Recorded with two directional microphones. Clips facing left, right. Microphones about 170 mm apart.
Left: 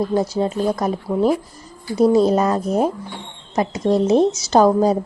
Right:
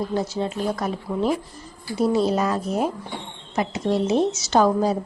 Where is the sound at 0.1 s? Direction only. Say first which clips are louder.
Left 5 dB; 40° left (ahead or behind).